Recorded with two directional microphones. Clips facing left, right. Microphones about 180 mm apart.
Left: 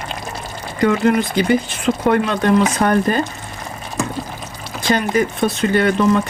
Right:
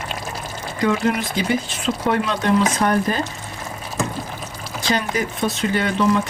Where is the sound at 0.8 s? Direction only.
60° left (ahead or behind).